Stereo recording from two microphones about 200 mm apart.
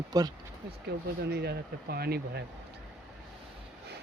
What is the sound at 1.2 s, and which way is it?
Speech, 55° right (ahead or behind).